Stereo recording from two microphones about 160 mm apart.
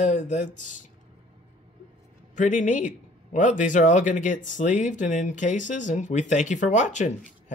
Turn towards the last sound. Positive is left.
turn(degrees=50)  # may be behind; listen again after turning